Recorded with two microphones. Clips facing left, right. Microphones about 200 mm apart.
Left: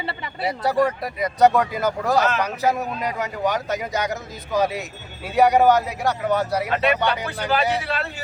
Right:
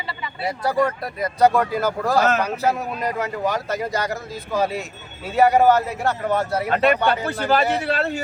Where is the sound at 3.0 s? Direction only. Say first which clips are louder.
Right 2 dB; centre (ahead or behind).